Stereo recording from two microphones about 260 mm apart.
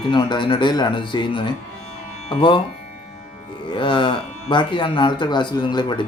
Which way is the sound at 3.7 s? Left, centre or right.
Centre.